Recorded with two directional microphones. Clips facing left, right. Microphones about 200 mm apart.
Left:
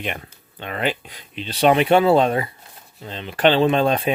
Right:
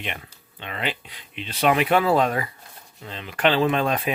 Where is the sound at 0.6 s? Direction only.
45° left (ahead or behind).